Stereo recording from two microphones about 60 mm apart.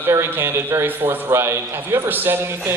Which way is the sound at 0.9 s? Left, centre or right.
Right.